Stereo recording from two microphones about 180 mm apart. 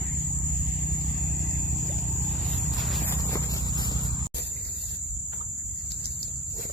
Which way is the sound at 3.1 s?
15° left (ahead or behind).